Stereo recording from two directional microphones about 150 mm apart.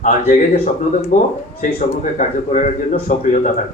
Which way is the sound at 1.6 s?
60° left (ahead or behind).